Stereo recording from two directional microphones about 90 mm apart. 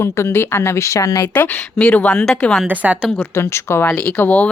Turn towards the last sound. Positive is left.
turn(degrees=15)  # may be behind; listen again after turning